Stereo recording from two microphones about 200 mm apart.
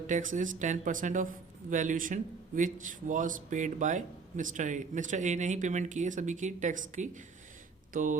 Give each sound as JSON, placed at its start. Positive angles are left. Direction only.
{"t": 0.1, "sound": "a man's voice", "side_deg": -40}